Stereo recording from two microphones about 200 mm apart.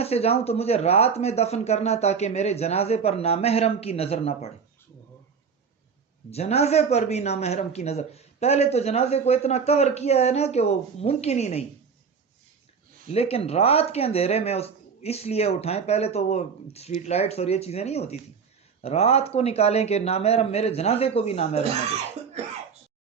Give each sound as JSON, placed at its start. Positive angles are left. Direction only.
{"t": 0.0, "sound": "speech", "side_deg": 30}
{"t": 6.3, "sound": "speech", "side_deg": 30}
{"t": 13.1, "sound": "speech", "side_deg": 30}